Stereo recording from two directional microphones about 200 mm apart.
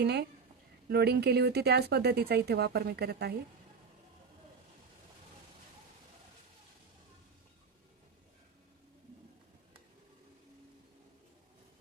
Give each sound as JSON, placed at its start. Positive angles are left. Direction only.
{"t": 0.0, "sound": "speech", "side_deg": -55}